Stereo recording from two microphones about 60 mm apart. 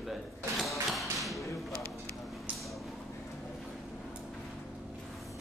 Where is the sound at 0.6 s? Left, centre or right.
Centre.